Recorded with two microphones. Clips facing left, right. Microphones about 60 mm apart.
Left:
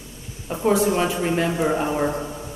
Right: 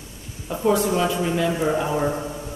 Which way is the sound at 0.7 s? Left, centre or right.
Left.